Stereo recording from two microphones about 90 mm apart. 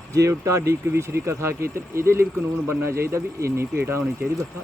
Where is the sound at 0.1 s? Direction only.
35° right (ahead or behind).